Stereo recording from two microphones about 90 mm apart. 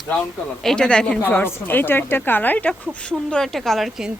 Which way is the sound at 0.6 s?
10° left (ahead or behind).